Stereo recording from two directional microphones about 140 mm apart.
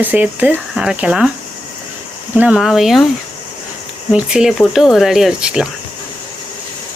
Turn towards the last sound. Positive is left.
turn(degrees=-5)  # may be behind; listen again after turning